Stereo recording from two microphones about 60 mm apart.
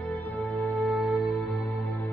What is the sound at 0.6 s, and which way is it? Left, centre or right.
Music, centre.